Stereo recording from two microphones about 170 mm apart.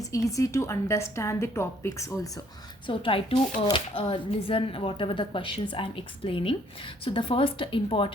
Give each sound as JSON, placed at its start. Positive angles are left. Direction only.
{"t": 0.0, "sound": "a woman's voice", "side_deg": 20}
{"t": 2.8, "sound": "speech", "side_deg": 30}